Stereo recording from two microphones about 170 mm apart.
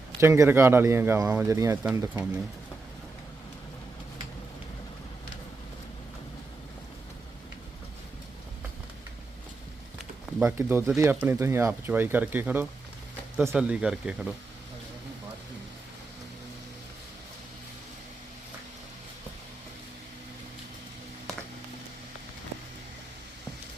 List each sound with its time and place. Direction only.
0.2 s speech: 15° right (ahead or behind)
10.3 s a sound: centre (ahead or behind)
10.6 s speech: 15° right (ahead or behind)